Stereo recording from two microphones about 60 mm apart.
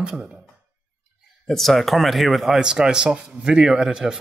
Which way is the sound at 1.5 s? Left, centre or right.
Centre.